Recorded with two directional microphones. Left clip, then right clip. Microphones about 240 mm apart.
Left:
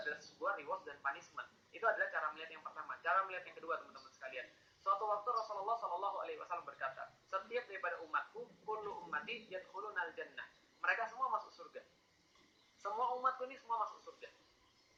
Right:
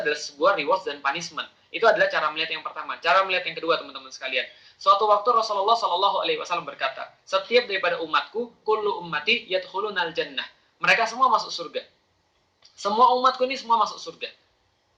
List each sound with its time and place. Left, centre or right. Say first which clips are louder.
0.0 s speech: right 19 dB; right